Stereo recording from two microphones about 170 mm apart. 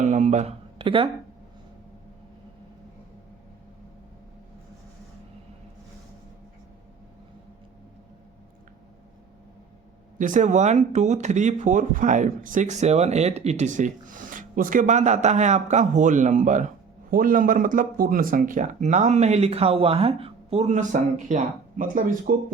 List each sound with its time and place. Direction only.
0.0 s speech: 45° right (ahead or behind)
10.2 s speech: 50° right (ahead or behind)